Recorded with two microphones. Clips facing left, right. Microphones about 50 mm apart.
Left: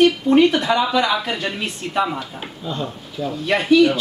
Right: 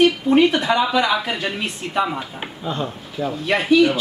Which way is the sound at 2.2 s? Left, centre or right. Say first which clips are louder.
Right 2 dB; right.